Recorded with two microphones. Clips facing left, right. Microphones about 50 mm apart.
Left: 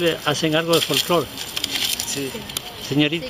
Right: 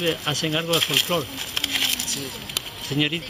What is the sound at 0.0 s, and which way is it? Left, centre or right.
Speech, left.